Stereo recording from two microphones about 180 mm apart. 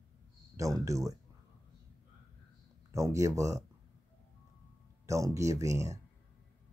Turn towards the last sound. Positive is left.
turn(degrees=-20)  # may be behind; listen again after turning